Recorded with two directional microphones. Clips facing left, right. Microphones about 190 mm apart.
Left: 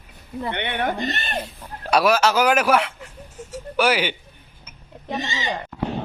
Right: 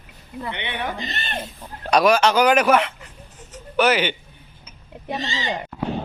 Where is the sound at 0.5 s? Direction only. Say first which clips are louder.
Left 5 dB; 50° left (ahead or behind).